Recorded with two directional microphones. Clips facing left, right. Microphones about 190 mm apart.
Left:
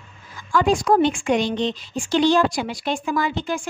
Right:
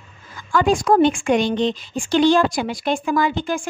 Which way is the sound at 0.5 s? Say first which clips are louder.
Right 2 dB; 50° right (ahead or behind).